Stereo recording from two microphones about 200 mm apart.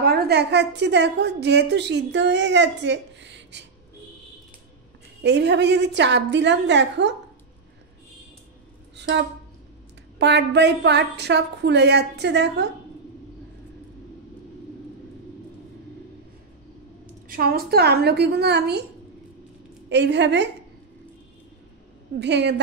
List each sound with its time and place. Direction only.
0.0 s a woman's voice: 50° right (ahead or behind)
5.2 s a woman's voice: 60° right (ahead or behind)
8.9 s a sound: 60° right (ahead or behind)
10.1 s a woman's voice: 60° right (ahead or behind)
17.3 s a woman's voice: 50° right (ahead or behind)
19.9 s a woman's voice: 60° right (ahead or behind)
22.2 s a woman's voice: 60° right (ahead or behind)